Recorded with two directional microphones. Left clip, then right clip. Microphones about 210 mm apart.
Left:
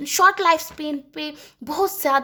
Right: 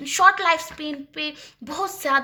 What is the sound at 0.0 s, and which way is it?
A woman's voice, 45° left (ahead or behind).